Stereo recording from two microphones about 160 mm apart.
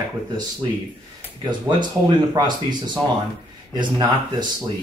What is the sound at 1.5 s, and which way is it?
Speech, 30° right (ahead or behind).